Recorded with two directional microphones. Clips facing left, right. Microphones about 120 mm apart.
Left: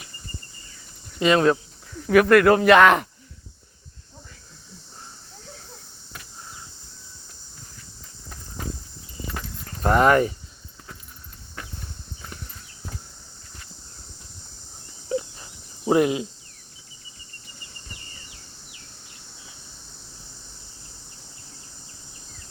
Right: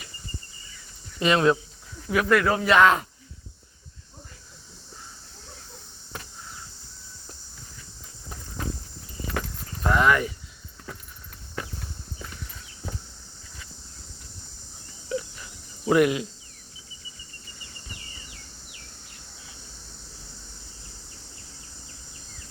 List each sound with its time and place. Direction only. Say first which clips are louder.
1.2 s speech: left 2 dB; 35° left (ahead or behind)
2.0 s speech: left 7 dB; 60° left (ahead or behind)
9.8 s speech: left 4 dB; 45° left (ahead or behind)
15.1 s a sound: left 3 dB; 35° left (ahead or behind)
15.9 s speech: left 1 dB; 25° left (ahead or behind)